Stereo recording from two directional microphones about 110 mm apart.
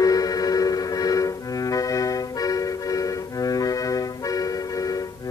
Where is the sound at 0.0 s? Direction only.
35° left (ahead or behind).